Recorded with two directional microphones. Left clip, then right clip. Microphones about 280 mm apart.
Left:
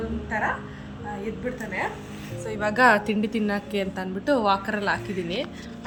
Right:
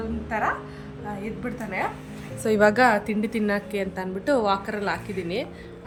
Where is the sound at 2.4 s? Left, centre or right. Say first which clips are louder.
Right 9 dB; right.